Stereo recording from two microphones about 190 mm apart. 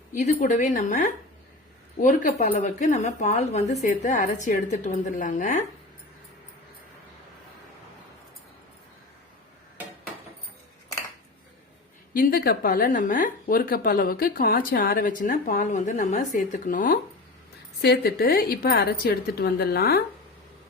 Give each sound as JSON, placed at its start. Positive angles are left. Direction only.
{"t": 0.1, "sound": "a woman's voice", "side_deg": 40}
{"t": 12.1, "sound": "a woman's voice", "side_deg": 50}